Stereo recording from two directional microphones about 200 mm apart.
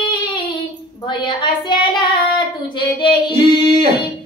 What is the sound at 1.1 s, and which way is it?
Speech, 25° left (ahead or behind).